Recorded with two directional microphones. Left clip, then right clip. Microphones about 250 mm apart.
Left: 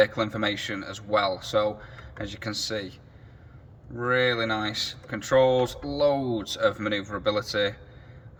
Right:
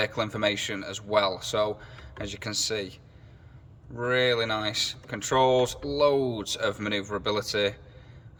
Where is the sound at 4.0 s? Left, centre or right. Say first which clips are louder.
Left 1 dB; centre.